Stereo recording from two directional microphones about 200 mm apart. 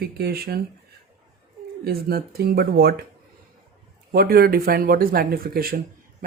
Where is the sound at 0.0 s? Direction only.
50° right (ahead or behind).